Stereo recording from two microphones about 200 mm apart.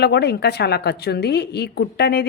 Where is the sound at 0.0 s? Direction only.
55° left (ahead or behind).